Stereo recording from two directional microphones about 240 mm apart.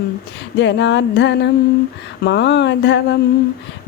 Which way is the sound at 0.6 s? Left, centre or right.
Left.